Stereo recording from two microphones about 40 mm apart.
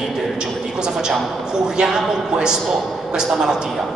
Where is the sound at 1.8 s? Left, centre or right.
Right.